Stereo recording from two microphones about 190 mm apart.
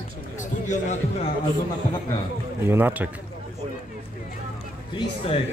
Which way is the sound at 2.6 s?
10° right (ahead or behind).